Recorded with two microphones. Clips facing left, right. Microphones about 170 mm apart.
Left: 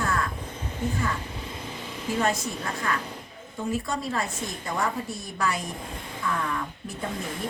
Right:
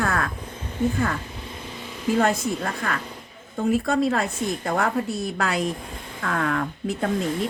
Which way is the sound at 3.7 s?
65° right (ahead or behind).